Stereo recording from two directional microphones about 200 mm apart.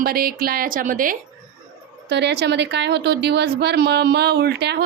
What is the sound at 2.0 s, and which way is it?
A woman's voice, 60° right (ahead or behind).